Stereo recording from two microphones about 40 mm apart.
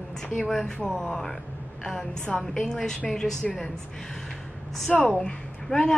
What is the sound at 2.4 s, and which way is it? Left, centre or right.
Speech, centre.